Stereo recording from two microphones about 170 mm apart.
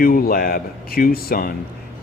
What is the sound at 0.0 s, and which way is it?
A man's voice, 60° left (ahead or behind).